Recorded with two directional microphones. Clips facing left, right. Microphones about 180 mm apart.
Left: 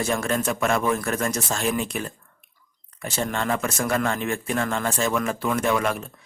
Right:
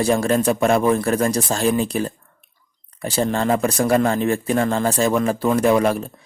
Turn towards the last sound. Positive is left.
turn(degrees=-35)  # may be behind; listen again after turning